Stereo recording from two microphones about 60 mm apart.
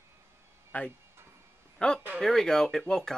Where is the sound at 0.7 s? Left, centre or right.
Left.